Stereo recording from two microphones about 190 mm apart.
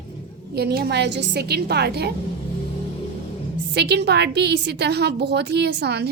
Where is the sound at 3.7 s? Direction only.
60° right (ahead or behind).